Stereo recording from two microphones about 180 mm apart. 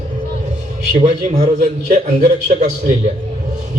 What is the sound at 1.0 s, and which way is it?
A man's voice, 40° right (ahead or behind).